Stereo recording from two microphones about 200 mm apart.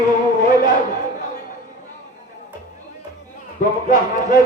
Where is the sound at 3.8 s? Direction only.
40° left (ahead or behind).